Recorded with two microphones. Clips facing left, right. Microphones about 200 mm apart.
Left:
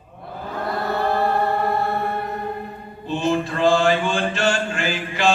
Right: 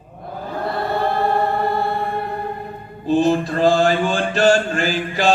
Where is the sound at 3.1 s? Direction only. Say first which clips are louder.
Right 5 dB; 40° right (ahead or behind).